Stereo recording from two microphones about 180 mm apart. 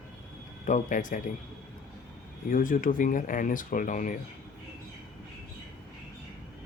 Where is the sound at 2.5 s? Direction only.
50° left (ahead or behind).